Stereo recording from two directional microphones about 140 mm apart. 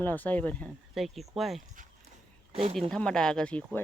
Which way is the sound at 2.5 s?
45° right (ahead or behind).